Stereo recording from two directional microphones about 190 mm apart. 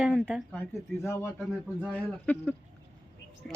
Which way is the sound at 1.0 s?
15° left (ahead or behind).